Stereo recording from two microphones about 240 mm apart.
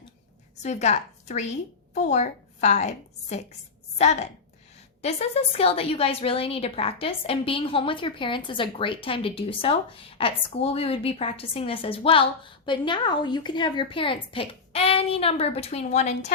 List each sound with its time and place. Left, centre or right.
0.5 s a woman's voice: left